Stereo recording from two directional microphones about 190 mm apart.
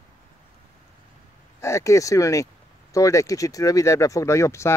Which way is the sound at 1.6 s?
15° left (ahead or behind).